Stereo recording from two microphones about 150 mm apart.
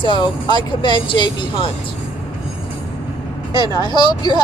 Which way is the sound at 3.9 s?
30° left (ahead or behind).